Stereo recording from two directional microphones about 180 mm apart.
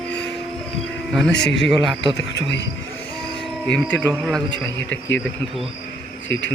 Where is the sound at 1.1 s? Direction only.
Centre (ahead or behind).